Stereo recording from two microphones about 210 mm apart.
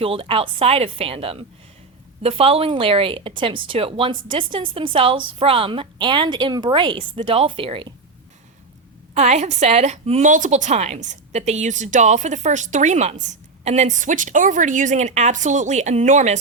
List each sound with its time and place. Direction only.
0.0 s a woman's voice: 25° right (ahead or behind)
9.1 s a woman's voice: 35° right (ahead or behind)